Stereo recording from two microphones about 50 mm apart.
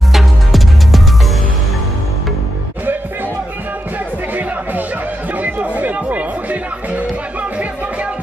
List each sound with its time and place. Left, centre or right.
0.1 s music: centre
5.3 s music: right